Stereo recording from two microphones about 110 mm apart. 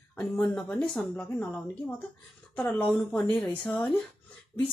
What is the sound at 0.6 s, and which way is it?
Speech, 10° left (ahead or behind).